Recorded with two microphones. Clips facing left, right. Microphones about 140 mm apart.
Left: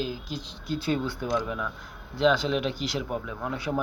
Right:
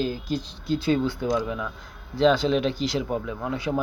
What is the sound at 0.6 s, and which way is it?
Speech, 25° right (ahead or behind).